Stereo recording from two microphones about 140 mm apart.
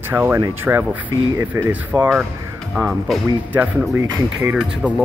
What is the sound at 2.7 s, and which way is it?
Speech, centre (ahead or behind).